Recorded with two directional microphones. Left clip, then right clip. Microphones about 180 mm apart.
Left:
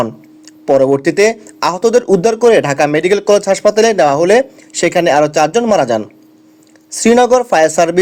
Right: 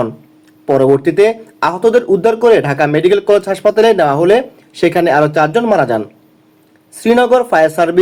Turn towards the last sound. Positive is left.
turn(degrees=40)  # may be behind; listen again after turning